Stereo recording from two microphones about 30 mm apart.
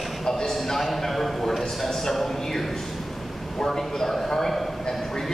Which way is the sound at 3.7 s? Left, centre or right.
Centre.